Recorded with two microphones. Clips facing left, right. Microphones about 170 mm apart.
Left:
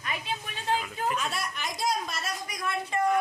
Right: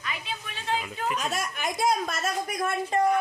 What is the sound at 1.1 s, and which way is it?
Speech, 40° right (ahead or behind).